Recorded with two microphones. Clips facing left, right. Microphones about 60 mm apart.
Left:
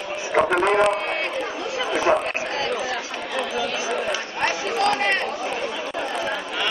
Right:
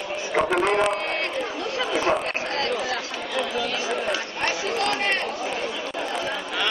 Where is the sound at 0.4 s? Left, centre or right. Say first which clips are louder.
Left 3 dB; centre.